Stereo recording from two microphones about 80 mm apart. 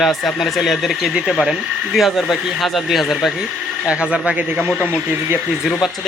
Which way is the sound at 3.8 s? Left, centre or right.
Centre.